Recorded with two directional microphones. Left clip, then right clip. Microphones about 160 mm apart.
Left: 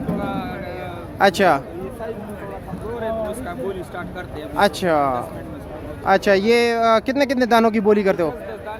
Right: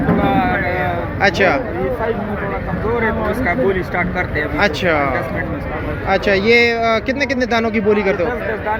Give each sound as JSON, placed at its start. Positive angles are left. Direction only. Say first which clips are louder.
{"t": 1.2, "sound": "speech", "louder": "right 1 dB", "side_deg": 50}
{"t": 4.4, "sound": "speech", "louder": "right 1 dB", "side_deg": 45}
{"t": 6.1, "sound": "speech", "louder": "right 2 dB", "side_deg": 55}